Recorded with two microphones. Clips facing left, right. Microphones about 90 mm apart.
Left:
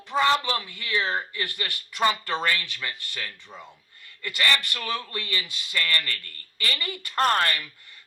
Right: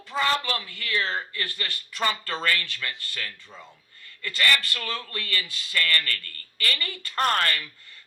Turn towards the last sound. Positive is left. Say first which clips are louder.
# even
turn(degrees=15)  # may be behind; listen again after turning